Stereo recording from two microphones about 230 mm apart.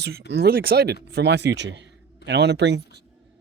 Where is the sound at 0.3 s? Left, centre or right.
Right.